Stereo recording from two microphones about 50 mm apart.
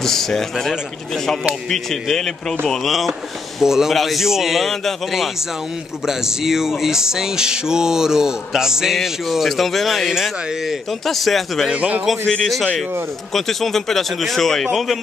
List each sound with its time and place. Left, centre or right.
0.0 s a man's voice: centre
3.5 s music: centre
3.9 s a man's voice: centre
4.6 s a man's voice: centre
6.0 s music: centre
8.9 s a man's voice: centre
10.5 s music: centre
10.9 s a man's voice: centre
11.7 s a man's voice: right
13.3 s a man's voice: centre